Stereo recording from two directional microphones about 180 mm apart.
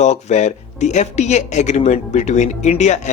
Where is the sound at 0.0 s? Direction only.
40° left (ahead or behind).